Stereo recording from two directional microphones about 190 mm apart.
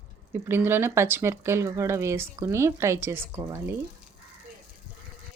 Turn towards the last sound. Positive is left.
turn(degrees=-15)  # may be behind; listen again after turning